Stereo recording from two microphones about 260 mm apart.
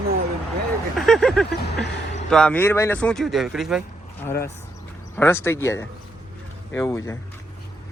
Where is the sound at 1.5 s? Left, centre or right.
Left.